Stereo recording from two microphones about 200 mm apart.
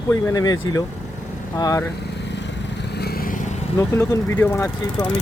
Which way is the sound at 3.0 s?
50° left (ahead or behind).